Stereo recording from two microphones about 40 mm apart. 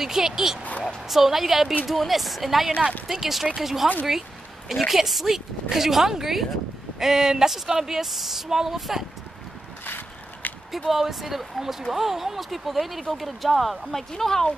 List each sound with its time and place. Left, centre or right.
0.0 s speech: centre
9.8 s mechanisms: left
10.9 s speech: centre